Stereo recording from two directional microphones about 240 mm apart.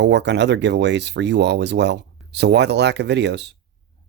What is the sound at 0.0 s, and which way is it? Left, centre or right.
Speech, right.